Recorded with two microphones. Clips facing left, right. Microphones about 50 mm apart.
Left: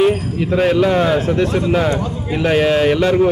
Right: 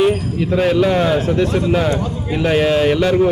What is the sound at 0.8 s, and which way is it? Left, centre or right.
Speech, centre.